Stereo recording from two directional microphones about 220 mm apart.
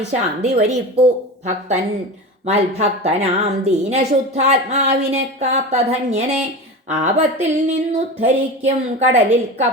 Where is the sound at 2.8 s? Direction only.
30° right (ahead or behind).